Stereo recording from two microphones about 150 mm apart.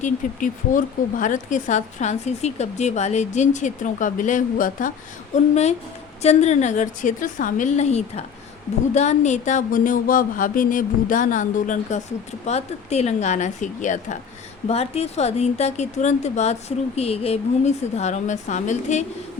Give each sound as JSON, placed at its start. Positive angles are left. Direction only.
{"t": 0.0, "sound": "a sound", "side_deg": 60}
{"t": 1.2, "sound": "speech", "side_deg": 55}
{"t": 6.2, "sound": "speech", "side_deg": 50}
{"t": 9.0, "sound": "a sound", "side_deg": 50}
{"t": 12.5, "sound": "speech", "side_deg": 45}
{"t": 14.7, "sound": "speech", "side_deg": 45}